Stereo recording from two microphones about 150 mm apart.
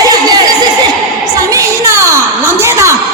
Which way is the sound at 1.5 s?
20° right (ahead or behind).